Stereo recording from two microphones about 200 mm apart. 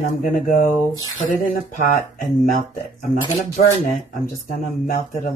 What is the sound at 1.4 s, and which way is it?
Speech, 40° left (ahead or behind).